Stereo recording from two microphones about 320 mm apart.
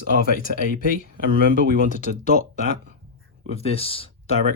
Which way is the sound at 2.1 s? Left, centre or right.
Right.